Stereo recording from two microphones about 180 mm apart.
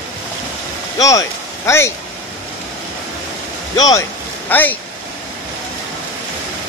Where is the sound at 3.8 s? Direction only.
20° left (ahead or behind).